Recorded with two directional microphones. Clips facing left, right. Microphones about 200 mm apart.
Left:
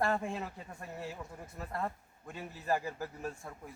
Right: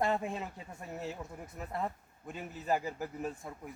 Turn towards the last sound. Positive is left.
turn(degrees=-20)  # may be behind; listen again after turning